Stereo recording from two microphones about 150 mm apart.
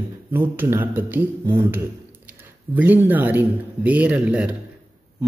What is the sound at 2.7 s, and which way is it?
A man's voice, 10° right (ahead or behind).